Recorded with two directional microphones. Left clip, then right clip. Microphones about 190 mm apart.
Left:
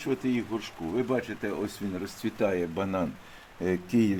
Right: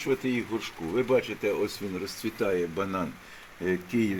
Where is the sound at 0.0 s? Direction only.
15° left (ahead or behind).